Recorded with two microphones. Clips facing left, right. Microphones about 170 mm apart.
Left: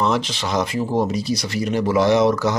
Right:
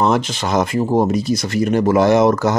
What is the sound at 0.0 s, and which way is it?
Speech, 50° right (ahead or behind).